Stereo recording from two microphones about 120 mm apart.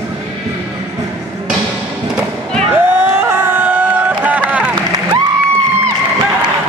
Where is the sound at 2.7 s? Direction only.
15° right (ahead or behind).